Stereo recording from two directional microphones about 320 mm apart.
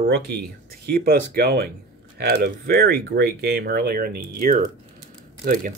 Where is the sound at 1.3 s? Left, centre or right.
Right.